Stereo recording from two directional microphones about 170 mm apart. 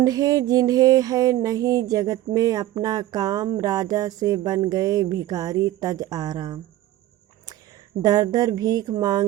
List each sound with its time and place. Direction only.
0.0 s music: 20° right (ahead or behind)
8.0 s music: 25° right (ahead or behind)